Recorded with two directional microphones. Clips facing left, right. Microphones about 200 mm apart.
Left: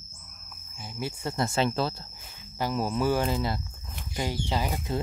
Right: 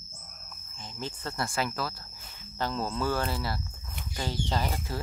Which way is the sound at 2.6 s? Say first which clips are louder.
Left 3 dB; 15° left (ahead or behind).